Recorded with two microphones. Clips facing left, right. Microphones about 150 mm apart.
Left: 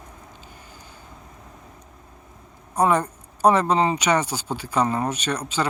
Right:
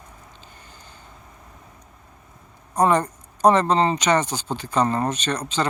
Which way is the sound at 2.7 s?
10° left (ahead or behind).